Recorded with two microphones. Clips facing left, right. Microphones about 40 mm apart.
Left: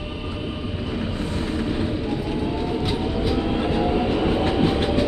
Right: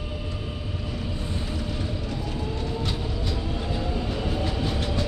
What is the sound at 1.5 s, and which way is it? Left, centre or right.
Vehicle, left.